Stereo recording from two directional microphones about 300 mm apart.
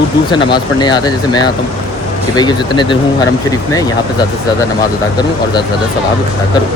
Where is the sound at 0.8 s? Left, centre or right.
Centre.